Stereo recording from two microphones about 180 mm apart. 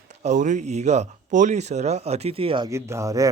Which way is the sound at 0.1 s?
40° right (ahead or behind).